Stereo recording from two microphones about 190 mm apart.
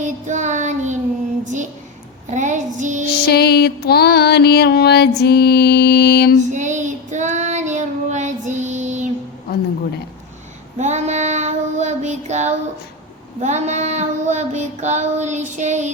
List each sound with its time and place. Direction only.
0.0 s child singing: 40° right (ahead or behind)
2.3 s female singing: 40° right (ahead or behind)
3.1 s music: 55° left (ahead or behind)
6.5 s child singing: 40° right (ahead or behind)
10.8 s child singing: 35° right (ahead or behind)
13.4 s female singing: 35° right (ahead or behind)